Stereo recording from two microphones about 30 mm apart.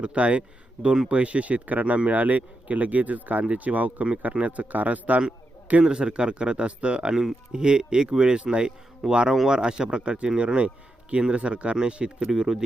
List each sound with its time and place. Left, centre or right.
0.0 s speech: right
3.4 s speech: right
5.8 s speech: right
7.5 s speech: right
10.0 s speech: right
10.2 s speech: right
12.4 s speech: right